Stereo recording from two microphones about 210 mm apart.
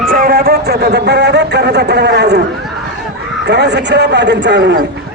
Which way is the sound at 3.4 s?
55° right (ahead or behind).